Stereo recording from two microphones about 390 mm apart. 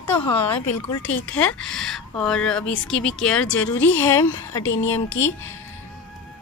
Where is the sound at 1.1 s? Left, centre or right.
Centre.